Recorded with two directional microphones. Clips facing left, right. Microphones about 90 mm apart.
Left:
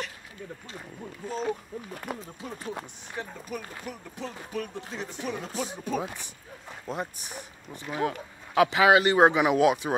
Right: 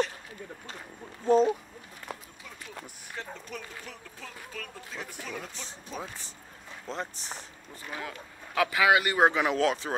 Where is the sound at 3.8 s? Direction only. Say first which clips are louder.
Left 7 dB; 20° left (ahead or behind).